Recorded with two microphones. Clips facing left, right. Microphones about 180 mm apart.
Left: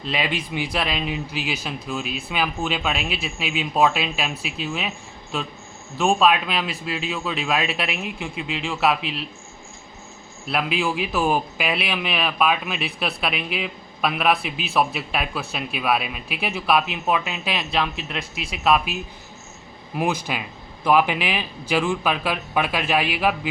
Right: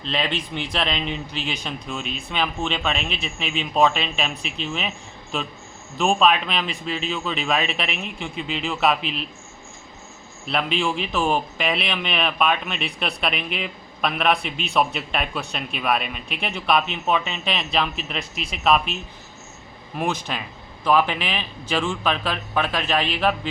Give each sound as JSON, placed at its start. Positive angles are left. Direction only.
{"t": 0.0, "sound": "speech", "side_deg": 10}
{"t": 6.0, "sound": "a man's voice", "side_deg": 0}
{"t": 10.5, "sound": "a man's voice", "side_deg": 5}
{"t": 20.0, "sound": "speech", "side_deg": 10}